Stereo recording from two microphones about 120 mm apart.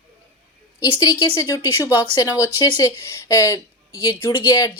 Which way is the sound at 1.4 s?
25° left (ahead or behind).